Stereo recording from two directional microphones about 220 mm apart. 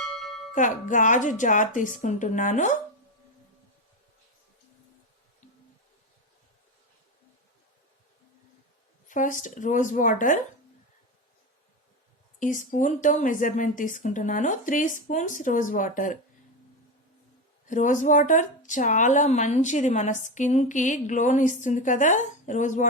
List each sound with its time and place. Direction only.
0.0 s bell: centre (ahead or behind)
0.5 s speech: 35° left (ahead or behind)
9.0 s speech: 35° left (ahead or behind)
12.4 s speech: 35° left (ahead or behind)
17.7 s speech: 35° left (ahead or behind)